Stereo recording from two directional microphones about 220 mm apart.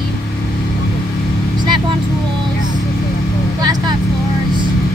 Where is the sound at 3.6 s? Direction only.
20° right (ahead or behind).